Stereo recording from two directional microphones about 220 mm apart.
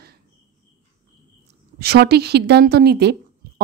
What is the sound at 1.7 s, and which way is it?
A woman's voice, 45° right (ahead or behind).